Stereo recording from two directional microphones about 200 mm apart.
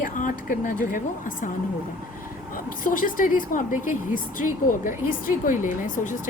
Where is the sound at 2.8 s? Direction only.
45° left (ahead or behind).